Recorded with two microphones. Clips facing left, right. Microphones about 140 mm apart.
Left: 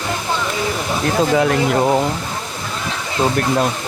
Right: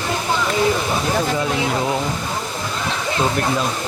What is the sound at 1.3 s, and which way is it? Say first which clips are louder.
Speech: left 6 dB; 65° left (ahead or behind).